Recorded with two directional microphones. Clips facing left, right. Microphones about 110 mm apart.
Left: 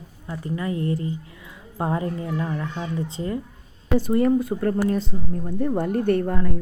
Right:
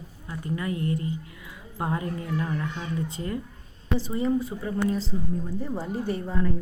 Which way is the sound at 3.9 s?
55° left (ahead or behind).